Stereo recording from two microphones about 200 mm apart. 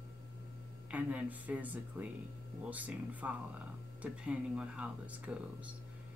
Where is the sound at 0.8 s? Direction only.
5° right (ahead or behind).